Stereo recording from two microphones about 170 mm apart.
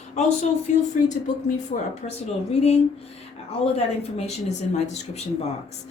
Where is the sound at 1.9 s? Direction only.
35° left (ahead or behind).